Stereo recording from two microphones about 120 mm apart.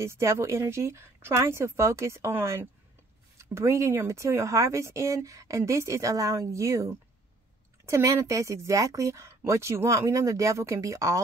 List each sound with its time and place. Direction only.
0.0 s speech: 20° right (ahead or behind)